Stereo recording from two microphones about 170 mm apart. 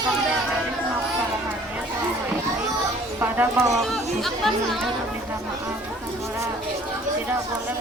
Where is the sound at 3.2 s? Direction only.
10° right (ahead or behind).